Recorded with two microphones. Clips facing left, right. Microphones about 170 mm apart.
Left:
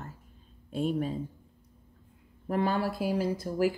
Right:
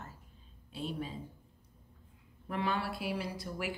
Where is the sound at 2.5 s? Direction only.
40° left (ahead or behind).